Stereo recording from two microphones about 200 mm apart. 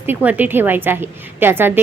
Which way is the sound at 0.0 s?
10° right (ahead or behind).